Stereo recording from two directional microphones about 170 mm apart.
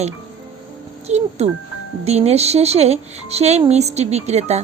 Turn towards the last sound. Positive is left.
turn(degrees=-40)  # may be behind; listen again after turning